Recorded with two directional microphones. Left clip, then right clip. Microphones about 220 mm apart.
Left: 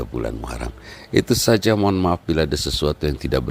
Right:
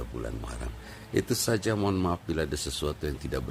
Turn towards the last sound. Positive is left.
turn(degrees=35)  # may be behind; listen again after turning